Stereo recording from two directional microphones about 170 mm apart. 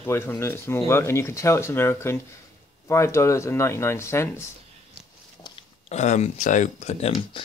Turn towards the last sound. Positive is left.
turn(degrees=30)  # may be behind; listen again after turning